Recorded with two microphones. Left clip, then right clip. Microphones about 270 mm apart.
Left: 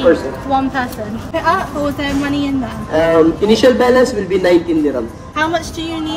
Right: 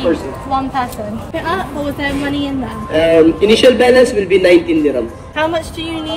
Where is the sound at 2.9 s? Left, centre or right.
Centre.